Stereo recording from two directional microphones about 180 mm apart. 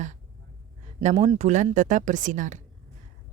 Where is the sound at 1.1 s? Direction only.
30° right (ahead or behind).